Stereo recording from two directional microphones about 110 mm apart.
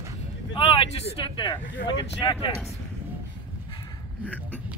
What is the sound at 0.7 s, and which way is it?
Speech, 55° left (ahead or behind).